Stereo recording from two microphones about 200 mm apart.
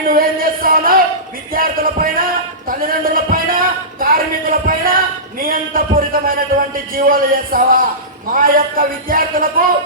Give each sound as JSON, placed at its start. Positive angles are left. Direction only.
{"t": 0.0, "sound": "music", "side_deg": -45}
{"t": 1.5, "sound": "speech", "side_deg": -45}
{"t": 2.6, "sound": "a sound", "side_deg": -45}
{"t": 6.9, "sound": "speech", "side_deg": -45}